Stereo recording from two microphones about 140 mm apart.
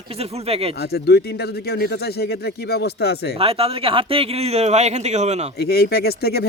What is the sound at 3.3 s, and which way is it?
Speech, 45° right (ahead or behind).